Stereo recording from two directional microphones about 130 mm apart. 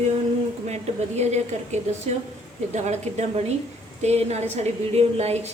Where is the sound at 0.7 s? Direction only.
60° right (ahead or behind).